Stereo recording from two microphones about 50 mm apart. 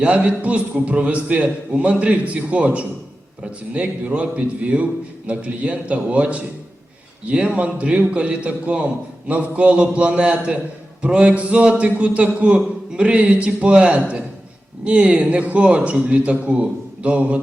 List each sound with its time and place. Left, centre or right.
0.0 s a man's voice: right